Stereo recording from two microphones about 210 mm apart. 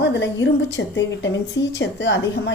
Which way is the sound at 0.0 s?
60° left (ahead or behind).